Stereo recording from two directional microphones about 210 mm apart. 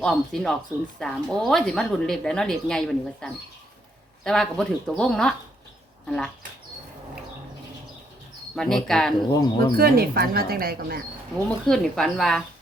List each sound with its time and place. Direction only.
0.0 s speech: centre (ahead or behind)
8.5 s speech: centre (ahead or behind)
9.3 s speech: 20° left (ahead or behind)
9.7 s speech: 45° right (ahead or behind)
11.4 s speech: centre (ahead or behind)